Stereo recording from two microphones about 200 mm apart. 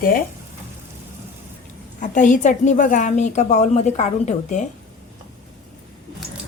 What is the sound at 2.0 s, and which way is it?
A woman's voice, 40° left (ahead or behind).